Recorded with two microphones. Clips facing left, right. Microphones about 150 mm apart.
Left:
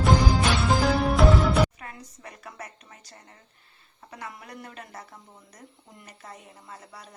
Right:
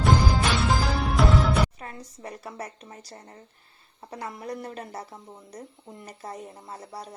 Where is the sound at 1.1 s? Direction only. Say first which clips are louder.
Right 1 dB; centre (ahead or behind).